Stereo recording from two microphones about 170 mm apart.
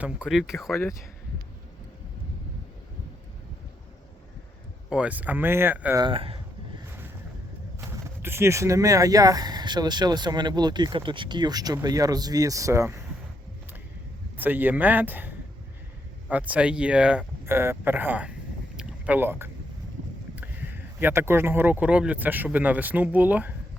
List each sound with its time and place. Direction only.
0.0 s speech: 5° right (ahead or behind)
0.7 s speech: 15° left (ahead or behind)
4.9 s speech: 5° right (ahead or behind)
6.0 s speech: 30° right (ahead or behind)
7.8 s speech: 15° right (ahead or behind)
14.3 s speech: 10° right (ahead or behind)
16.3 s speech: 5° right (ahead or behind)
18.8 s vehicle: 10° right (ahead or behind)
20.3 s speech: 10° right (ahead or behind)